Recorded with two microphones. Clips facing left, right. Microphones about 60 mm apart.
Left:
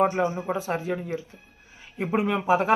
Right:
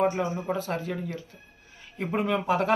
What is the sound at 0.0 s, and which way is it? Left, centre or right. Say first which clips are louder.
Speech: left 3 dB; centre.